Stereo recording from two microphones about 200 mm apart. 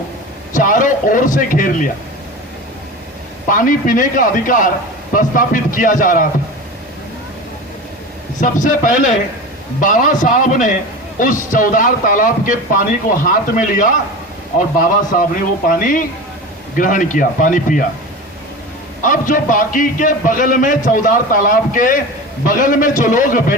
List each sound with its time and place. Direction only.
0.5 s a man's voice: 40° left (ahead or behind)
3.5 s a man's voice: 40° left (ahead or behind)
8.4 s a man's voice: 40° left (ahead or behind)
19.0 s a man's voice: 40° left (ahead or behind)